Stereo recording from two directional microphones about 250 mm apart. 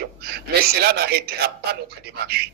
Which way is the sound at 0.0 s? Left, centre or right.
Right.